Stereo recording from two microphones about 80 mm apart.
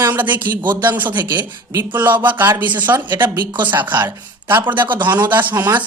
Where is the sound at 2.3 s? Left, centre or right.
Right.